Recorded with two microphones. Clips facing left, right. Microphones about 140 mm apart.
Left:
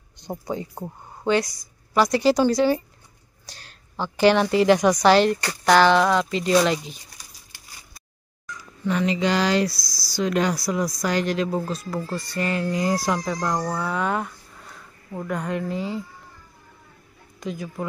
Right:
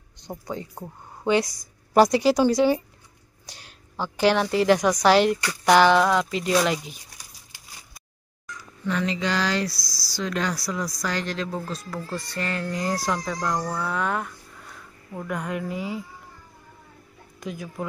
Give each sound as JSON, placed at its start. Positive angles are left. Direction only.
{"t": 0.5, "sound": "speech", "side_deg": 15}
{"t": 2.0, "sound": "a woman's voice", "side_deg": -15}
{"t": 8.8, "sound": "speech", "side_deg": 10}
{"t": 13.7, "sound": "a sound", "side_deg": 5}
{"t": 15.2, "sound": "speech", "side_deg": -5}
{"t": 17.4, "sound": "speech", "side_deg": -5}